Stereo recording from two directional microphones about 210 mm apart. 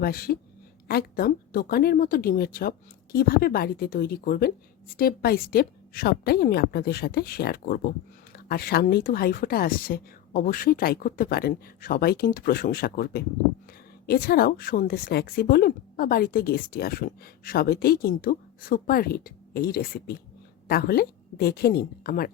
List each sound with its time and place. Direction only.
0.0 s speech: 45° left (ahead or behind)